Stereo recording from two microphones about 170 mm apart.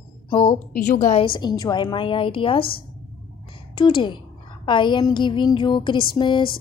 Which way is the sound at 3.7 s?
30° left (ahead or behind).